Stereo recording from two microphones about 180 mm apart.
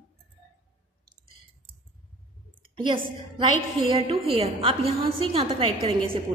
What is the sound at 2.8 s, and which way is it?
A woman's voice, 25° right (ahead or behind).